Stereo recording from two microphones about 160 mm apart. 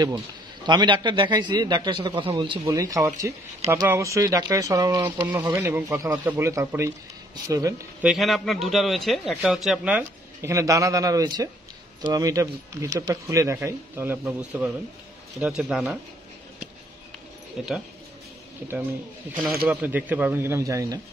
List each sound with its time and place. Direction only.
0.7 s speech: 30° right (ahead or behind)
2.7 s a man's voice: 20° right (ahead or behind)
8.0 s a man's voice: centre (ahead or behind)
19.7 s a man's voice: 10° right (ahead or behind)